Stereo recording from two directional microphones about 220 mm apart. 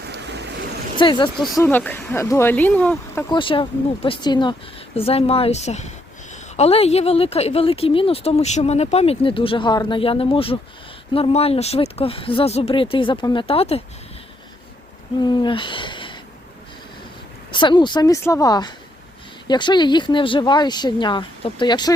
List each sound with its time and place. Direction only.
0.0 s vehicle: 50° right (ahead or behind)
0.9 s speech: 20° left (ahead or behind)
1.5 s speech: 10° left (ahead or behind)
3.2 s speech: 20° left (ahead or behind)
15.2 s owl: 20° left (ahead or behind)
17.5 s speech: 20° left (ahead or behind)